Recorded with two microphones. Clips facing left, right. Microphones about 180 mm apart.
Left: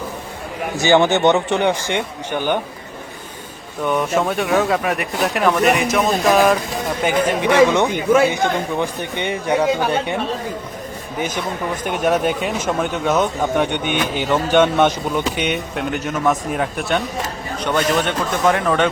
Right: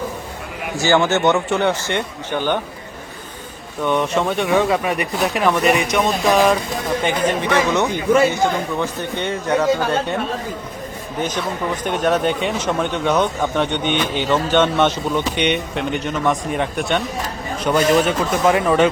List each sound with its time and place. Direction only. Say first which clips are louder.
0.8 s speech: left 2 dB; 15° left (ahead or behind)
3.8 s speech: even; 5° left (ahead or behind)
11.9 s speech: even; 10° left (ahead or behind)